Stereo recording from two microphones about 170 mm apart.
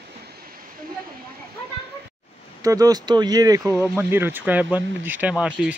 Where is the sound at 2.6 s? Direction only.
20° right (ahead or behind).